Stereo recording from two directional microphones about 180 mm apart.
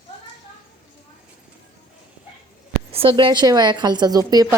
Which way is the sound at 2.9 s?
30° right (ahead or behind).